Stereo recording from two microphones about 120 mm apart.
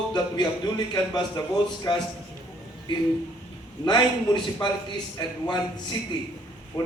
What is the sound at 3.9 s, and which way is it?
Speech, 40° left (ahead or behind).